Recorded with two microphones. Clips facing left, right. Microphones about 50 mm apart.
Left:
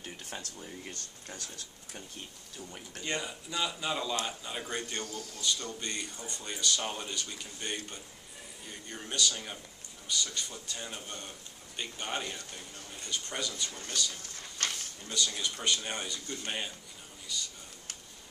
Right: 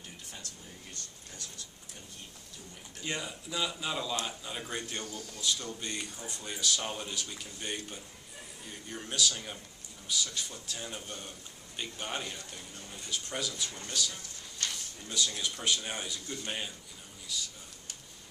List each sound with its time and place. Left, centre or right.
0.0 s air conditioning: left
1.3 s speech: left
3.1 s speech: centre
14.6 s a sound: left
15.0 s speech: centre
16.4 s a man's voice: centre